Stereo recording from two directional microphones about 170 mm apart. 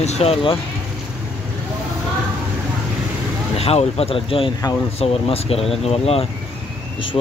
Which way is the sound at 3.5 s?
35° left (ahead or behind).